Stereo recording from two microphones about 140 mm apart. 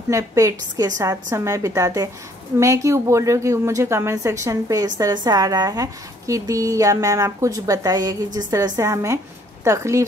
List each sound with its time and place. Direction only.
0.1 s speech: 20° right (ahead or behind)